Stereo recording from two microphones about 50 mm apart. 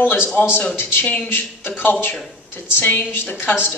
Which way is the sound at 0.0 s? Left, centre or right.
Left.